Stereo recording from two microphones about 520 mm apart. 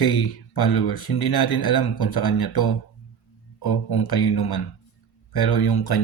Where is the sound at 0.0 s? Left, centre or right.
Left.